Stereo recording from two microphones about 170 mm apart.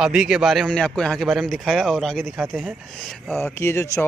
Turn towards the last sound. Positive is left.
turn(degrees=15)  # may be behind; listen again after turning